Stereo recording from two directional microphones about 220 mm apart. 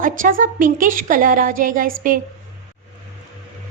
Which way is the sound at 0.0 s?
40° right (ahead or behind).